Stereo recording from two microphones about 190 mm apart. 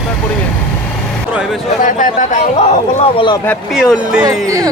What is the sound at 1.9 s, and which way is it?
Speech, 40° left (ahead or behind).